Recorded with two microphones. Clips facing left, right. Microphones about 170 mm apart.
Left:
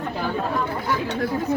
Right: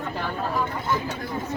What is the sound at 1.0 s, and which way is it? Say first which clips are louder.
Speech: left 6 dB; 70° left (ahead or behind).